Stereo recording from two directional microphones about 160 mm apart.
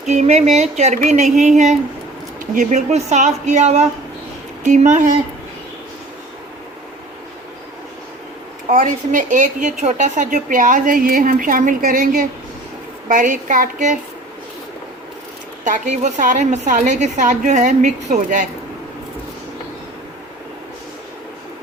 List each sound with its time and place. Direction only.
0.1 s a woman's voice: 45° right (ahead or behind)
8.7 s a woman's voice: 55° right (ahead or behind)
15.6 s a woman's voice: 50° right (ahead or behind)